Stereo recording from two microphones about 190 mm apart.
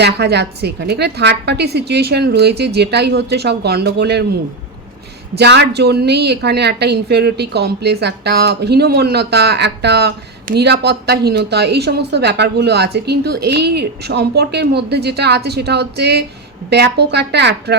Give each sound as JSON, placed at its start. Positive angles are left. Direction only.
{"t": 0.0, "sound": "a woman's voice", "side_deg": -60}
{"t": 5.4, "sound": "a woman's voice", "side_deg": -60}